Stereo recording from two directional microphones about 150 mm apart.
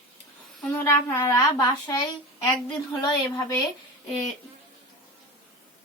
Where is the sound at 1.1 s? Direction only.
20° left (ahead or behind).